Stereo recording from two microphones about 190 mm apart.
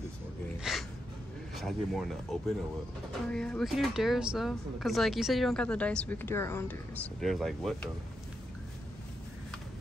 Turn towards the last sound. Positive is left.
turn(degrees=0)  # may be behind; listen again after turning